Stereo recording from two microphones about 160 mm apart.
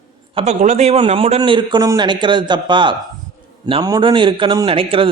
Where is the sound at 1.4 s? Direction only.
30° right (ahead or behind).